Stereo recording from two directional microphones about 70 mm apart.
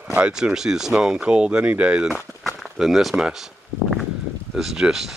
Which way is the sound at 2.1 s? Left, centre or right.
Centre.